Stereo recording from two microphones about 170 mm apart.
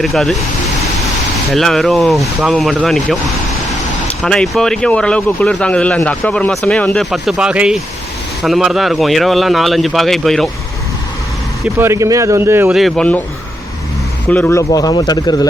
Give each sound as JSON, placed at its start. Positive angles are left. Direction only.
{"t": 0.0, "sound": "speech", "side_deg": 0}
{"t": 1.5, "sound": "speech", "side_deg": 0}
{"t": 4.2, "sound": "speech", "side_deg": 0}
{"t": 11.8, "sound": "speech", "side_deg": -15}
{"t": 12.7, "sound": "speech", "side_deg": 5}
{"t": 14.3, "sound": "speech", "side_deg": 10}
{"t": 14.7, "sound": "speech", "side_deg": 25}